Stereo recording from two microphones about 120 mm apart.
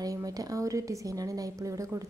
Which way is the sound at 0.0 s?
30° right (ahead or behind).